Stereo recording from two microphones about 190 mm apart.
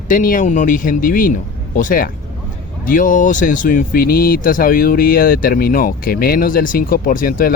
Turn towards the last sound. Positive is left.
turn(degrees=45)  # may be behind; listen again after turning